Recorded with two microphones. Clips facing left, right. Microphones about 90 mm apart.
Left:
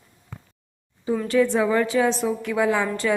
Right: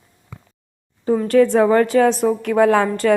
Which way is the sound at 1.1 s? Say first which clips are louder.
Right 6 dB; 45° right (ahead or behind).